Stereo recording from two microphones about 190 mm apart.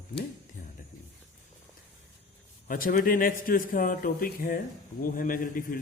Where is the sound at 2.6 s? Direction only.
45° left (ahead or behind).